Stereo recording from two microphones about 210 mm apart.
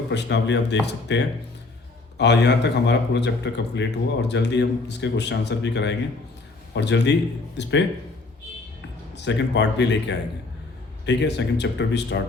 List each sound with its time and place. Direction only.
0.1 s speech: 55° left (ahead or behind)
9.1 s speech: 55° left (ahead or behind)